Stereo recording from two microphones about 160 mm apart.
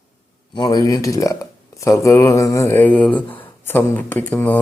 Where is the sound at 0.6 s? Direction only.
25° left (ahead or behind).